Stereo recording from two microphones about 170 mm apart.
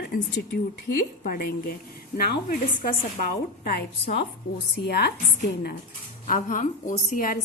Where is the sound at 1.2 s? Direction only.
60° left (ahead or behind).